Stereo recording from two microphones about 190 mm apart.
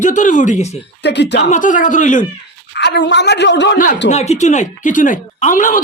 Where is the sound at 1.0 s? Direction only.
65° left (ahead or behind).